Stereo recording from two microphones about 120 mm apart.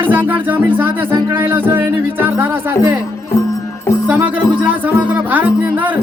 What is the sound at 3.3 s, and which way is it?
Music, 25° left (ahead or behind).